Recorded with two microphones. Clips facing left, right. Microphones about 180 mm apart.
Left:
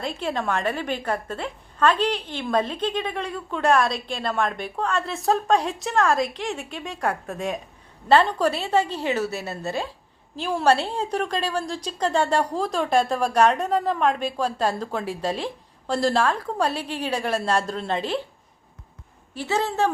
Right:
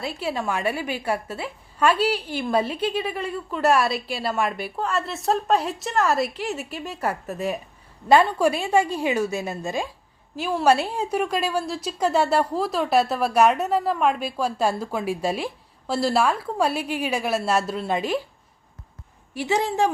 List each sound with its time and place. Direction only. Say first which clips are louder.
0.0 s a woman's voice: even; 5° right (ahead or behind)
19.3 s a woman's voice: right 2 dB; 15° right (ahead or behind)